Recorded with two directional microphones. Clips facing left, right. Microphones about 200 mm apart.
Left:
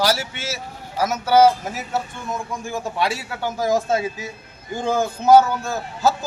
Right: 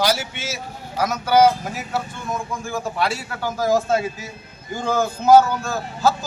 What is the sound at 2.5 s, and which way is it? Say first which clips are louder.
Speech: right 1 dB; 20° left (ahead or behind).